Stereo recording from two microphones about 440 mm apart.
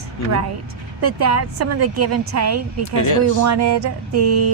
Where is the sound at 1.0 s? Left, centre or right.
Right.